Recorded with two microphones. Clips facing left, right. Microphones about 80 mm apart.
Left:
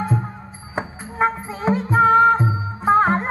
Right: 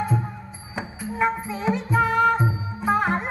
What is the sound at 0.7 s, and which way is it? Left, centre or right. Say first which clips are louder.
Music: left 3 dB; left.